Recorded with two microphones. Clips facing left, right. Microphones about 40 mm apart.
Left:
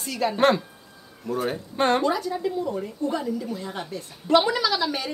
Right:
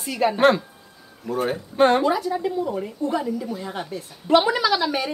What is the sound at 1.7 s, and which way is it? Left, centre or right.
Speech, centre.